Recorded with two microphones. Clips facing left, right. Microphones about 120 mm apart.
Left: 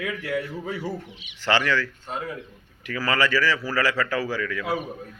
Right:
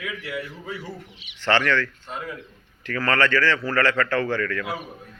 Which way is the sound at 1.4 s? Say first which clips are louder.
Right 1 dB; 10° left (ahead or behind).